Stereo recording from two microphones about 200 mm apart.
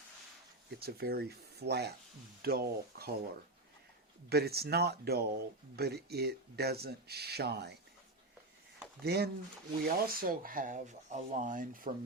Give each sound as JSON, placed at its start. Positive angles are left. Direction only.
{"t": 0.8, "sound": "speech", "side_deg": -50}
{"t": 4.3, "sound": "speech", "side_deg": -55}
{"t": 9.0, "sound": "speech", "side_deg": -50}